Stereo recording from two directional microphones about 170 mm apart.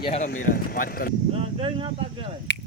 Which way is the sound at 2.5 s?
90° left.